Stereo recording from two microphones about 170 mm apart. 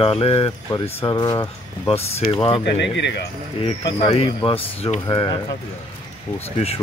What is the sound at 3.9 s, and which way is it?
Speech, 35° left (ahead or behind).